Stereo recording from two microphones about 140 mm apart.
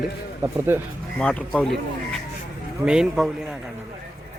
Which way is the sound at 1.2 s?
10° left (ahead or behind).